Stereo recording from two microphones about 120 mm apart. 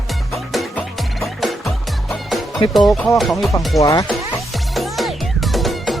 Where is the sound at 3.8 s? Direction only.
30° left (ahead or behind).